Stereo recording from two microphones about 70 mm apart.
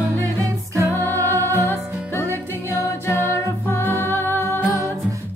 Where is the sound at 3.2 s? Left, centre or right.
Left.